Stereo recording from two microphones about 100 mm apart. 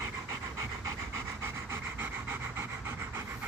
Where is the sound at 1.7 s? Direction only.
20° right (ahead or behind).